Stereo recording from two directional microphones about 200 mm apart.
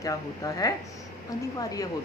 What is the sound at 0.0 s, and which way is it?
A woman's voice, 15° left (ahead or behind).